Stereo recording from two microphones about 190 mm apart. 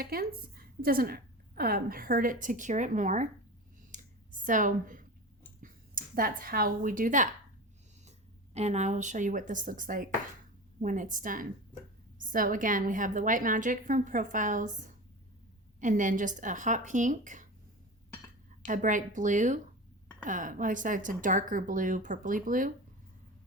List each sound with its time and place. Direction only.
0.0 s a woman's voice: 50° right (ahead or behind)
3.9 s clicking: 45° right (ahead or behind)
5.6 s a woman's voice: 50° right (ahead or behind)
8.5 s a woman's voice: 35° right (ahead or behind)
18.6 s a woman's voice: 45° right (ahead or behind)